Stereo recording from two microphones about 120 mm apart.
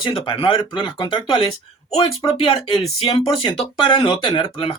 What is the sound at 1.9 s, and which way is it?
A man's voice, 55° left (ahead or behind).